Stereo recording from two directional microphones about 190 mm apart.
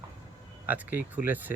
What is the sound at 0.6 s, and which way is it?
Speech, 10° right (ahead or behind).